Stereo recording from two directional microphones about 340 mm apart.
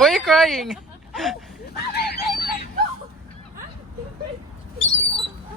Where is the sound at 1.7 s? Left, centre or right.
Left.